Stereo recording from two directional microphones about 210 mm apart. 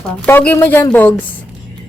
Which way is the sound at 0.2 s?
5° left (ahead or behind).